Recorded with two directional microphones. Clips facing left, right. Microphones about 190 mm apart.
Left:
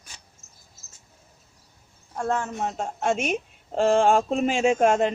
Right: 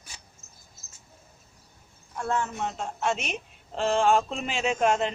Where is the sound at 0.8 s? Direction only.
50° right (ahead or behind).